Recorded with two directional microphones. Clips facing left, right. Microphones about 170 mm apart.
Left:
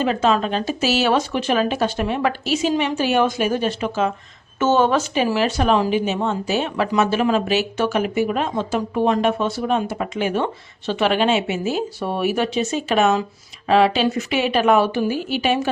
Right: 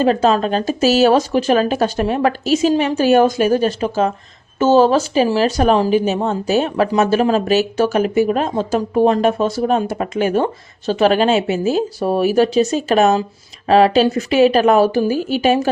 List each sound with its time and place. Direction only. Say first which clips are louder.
0.0 s speech: right 4 dB; 40° right (ahead or behind)